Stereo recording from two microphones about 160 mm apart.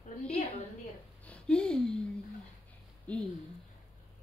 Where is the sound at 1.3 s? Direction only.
5° left (ahead or behind).